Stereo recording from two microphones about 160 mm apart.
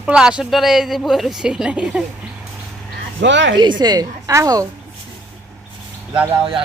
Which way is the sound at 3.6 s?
25° right (ahead or behind).